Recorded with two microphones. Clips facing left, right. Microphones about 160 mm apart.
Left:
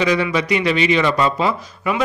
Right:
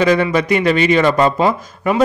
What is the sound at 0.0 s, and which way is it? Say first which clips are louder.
A man's voice: right 4 dB; 50° right (ahead or behind).